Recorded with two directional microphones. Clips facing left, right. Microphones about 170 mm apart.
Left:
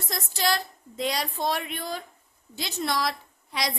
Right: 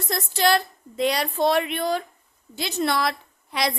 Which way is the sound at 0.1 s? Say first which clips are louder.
Right 6 dB; 60° right (ahead or behind).